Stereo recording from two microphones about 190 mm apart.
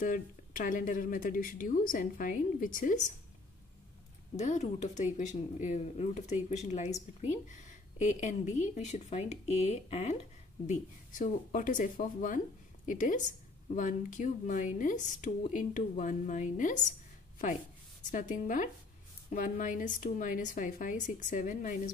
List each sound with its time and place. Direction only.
0.0 s speech: 45° left (ahead or behind)
4.4 s speech: 40° left (ahead or behind)
18.1 s speech: 45° left (ahead or behind)